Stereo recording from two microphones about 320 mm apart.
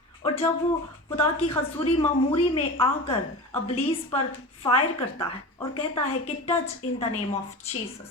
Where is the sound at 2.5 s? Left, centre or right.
Centre.